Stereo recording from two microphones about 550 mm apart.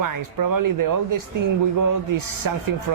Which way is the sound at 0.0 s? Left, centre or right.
Right.